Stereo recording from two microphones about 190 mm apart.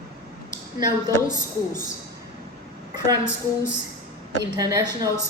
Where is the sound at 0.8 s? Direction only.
20° right (ahead or behind).